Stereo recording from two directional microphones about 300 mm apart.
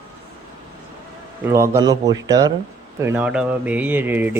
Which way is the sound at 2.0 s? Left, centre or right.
Right.